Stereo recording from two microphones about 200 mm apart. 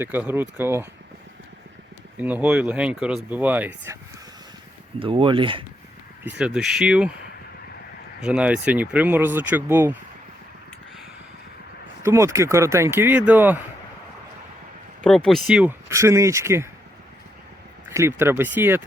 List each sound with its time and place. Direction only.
0.0 s speech: 10° right (ahead or behind)
2.1 s speech: 10° right (ahead or behind)
4.9 s speech: 25° right (ahead or behind)
6.3 s speech: 5° right (ahead or behind)
8.2 s speech: 5° right (ahead or behind)
12.0 s speech: 15° right (ahead or behind)
15.0 s speech: 5° left (ahead or behind); by 16.6 s 15° right (ahead or behind)
17.8 s speech: 15° right (ahead or behind)